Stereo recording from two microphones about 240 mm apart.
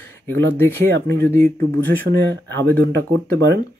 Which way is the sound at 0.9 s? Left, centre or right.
Right.